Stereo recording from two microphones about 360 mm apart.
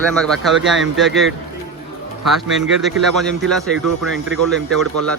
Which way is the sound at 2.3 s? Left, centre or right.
Centre.